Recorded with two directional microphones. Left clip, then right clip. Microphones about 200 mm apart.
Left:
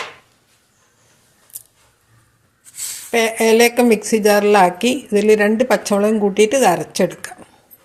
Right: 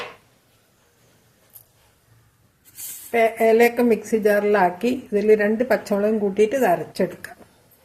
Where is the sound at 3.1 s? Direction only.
40° left (ahead or behind).